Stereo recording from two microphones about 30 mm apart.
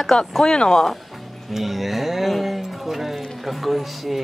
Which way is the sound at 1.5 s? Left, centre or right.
Centre.